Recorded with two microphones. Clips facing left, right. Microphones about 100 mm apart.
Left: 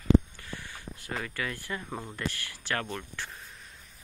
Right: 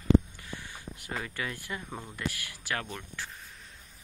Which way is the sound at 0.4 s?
15° right (ahead or behind).